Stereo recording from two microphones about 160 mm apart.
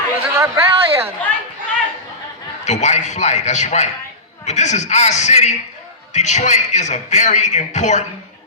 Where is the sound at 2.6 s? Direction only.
45° left (ahead or behind).